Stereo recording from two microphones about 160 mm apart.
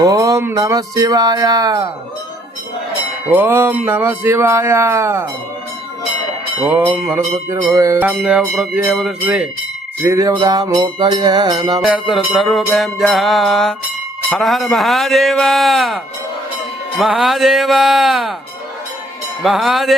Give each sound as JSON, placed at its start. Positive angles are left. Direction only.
{"t": 0.0, "sound": "speech", "side_deg": -20}
{"t": 3.2, "sound": "speech", "side_deg": -15}
{"t": 6.6, "sound": "speech", "side_deg": -10}
{"t": 7.5, "sound": "speech", "side_deg": -20}
{"t": 10.0, "sound": "speech", "side_deg": -20}
{"t": 11.8, "sound": "music", "side_deg": 0}
{"t": 17.0, "sound": "music", "side_deg": 0}
{"t": 19.4, "sound": "music", "side_deg": 0}